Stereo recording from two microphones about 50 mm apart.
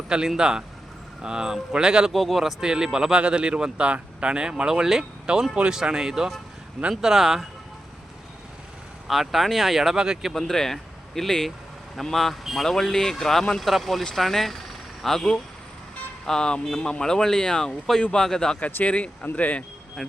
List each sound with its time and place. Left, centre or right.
0.3 s speech: centre
2.1 s speech: centre
9.0 s speech: centre
10.3 s speech: centre
18.6 s speech: left
20.0 s speech: centre